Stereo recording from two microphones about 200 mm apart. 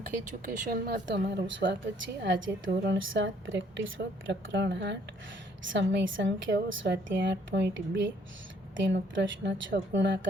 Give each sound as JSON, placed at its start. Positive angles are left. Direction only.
{"t": 0.4, "sound": "a woman's voice", "side_deg": -50}